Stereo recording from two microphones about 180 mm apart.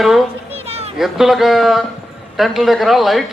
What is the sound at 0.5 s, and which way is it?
Children playing, 35° right (ahead or behind).